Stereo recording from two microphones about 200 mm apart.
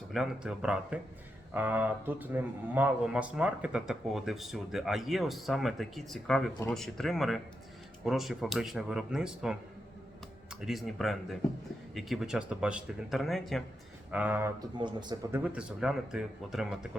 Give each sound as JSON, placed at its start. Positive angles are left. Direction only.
{"t": 0.1, "sound": "speech", "side_deg": -5}
{"t": 14.8, "sound": "a man's voice", "side_deg": -20}
{"t": 15.4, "sound": "speech", "side_deg": -5}